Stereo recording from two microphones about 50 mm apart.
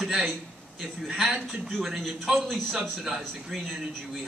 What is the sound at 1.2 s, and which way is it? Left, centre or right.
A man's voice, centre.